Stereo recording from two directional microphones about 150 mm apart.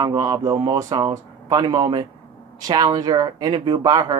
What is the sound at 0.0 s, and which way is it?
Speech, 25° right (ahead or behind).